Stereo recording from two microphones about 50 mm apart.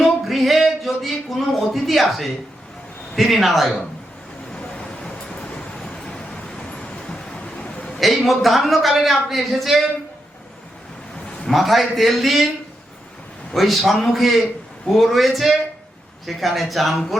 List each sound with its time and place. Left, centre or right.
0.0 s a sound: centre
3.2 s a man's voice: centre
4.5 s vehicle: centre
7.0 s a sound: centre
7.9 s a man's voice: centre
11.4 s a man's voice: centre
13.5 s a man's voice: centre